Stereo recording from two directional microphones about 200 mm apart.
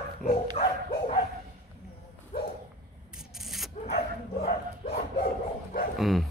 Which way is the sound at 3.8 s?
35° left (ahead or behind).